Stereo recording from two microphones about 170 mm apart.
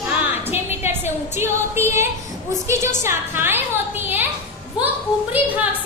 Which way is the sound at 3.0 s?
15° right (ahead or behind).